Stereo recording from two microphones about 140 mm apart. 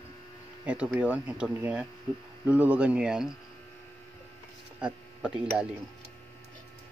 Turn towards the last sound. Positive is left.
turn(degrees=-5)  # may be behind; listen again after turning